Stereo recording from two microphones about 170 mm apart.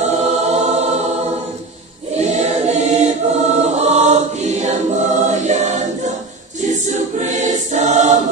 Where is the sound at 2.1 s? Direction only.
40° right (ahead or behind).